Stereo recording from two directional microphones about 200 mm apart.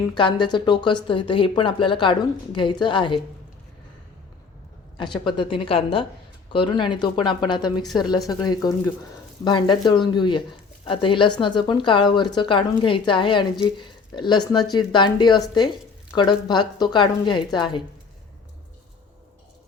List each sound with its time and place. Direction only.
0.1 s speech: 25° left (ahead or behind)
5.2 s speech: 25° left (ahead or behind)